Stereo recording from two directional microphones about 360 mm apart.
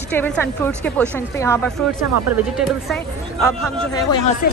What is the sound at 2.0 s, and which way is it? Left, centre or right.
Speech, right.